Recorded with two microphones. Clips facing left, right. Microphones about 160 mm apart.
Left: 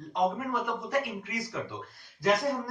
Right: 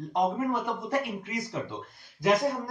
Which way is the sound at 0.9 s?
25° right (ahead or behind).